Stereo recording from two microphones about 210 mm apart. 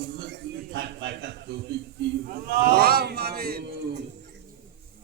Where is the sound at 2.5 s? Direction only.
45° right (ahead or behind).